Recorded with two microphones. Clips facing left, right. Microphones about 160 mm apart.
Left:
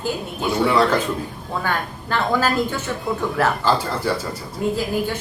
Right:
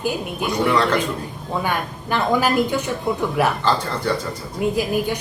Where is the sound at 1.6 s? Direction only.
15° right (ahead or behind).